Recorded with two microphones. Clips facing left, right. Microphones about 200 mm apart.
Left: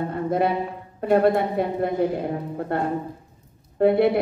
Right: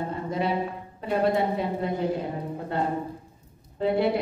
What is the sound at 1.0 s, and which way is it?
A woman's voice, 55° left (ahead or behind).